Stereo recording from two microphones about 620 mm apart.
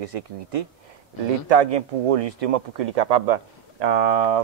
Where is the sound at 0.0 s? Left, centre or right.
Right.